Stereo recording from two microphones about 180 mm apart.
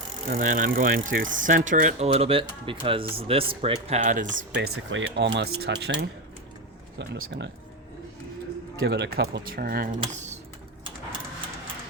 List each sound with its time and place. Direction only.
0.3 s speech: 45° right (ahead or behind)
4.3 s speech: 80° right
5.5 s speech: 65° right (ahead or behind)
7.0 s speech: 75° right (ahead or behind)
8.8 s speech: 65° right (ahead or behind)
10.1 s speech: 40° right (ahead or behind)